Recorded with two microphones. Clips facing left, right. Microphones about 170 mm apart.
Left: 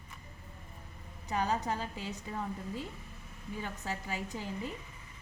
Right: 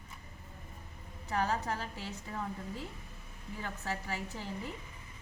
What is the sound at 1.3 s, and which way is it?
Speech, 15° left (ahead or behind).